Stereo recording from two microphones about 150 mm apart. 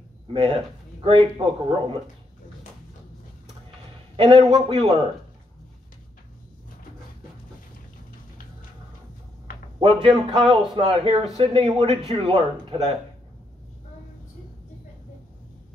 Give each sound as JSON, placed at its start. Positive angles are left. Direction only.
{"t": 0.3, "sound": "speech", "side_deg": -40}
{"t": 4.2, "sound": "speech", "side_deg": -35}
{"t": 10.0, "sound": "speech", "side_deg": -35}